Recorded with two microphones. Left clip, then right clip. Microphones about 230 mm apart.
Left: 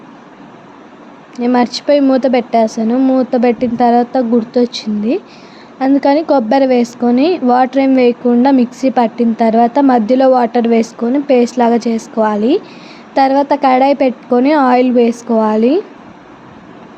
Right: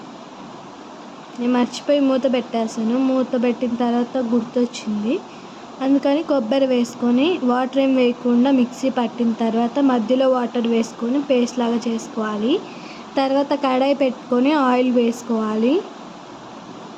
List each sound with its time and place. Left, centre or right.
1.4 s speech: centre
7.2 s speech: left
7.4 s a woman's voice: centre